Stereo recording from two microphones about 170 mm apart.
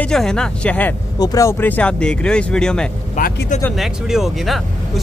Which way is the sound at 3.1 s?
55° left (ahead or behind).